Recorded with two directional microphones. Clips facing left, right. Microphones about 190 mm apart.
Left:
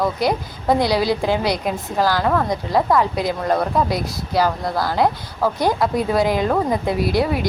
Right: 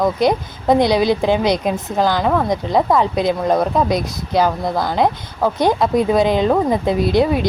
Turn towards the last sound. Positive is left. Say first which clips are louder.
# right 4 dB
turn(degrees=-20)  # may be behind; listen again after turning